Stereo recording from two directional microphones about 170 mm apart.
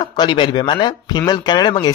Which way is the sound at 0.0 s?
25° left (ahead or behind).